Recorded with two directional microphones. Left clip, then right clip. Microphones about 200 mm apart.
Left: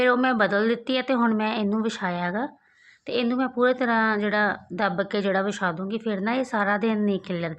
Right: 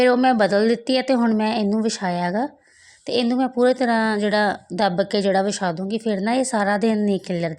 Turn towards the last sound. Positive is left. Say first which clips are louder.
# right 4 dB
turn(degrees=-35)  # may be behind; listen again after turning